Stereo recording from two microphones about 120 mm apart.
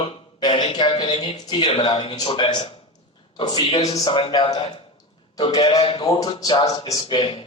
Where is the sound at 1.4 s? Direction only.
40° left (ahead or behind).